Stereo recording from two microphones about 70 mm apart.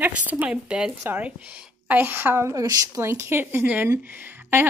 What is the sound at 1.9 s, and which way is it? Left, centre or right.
A woman's voice, right.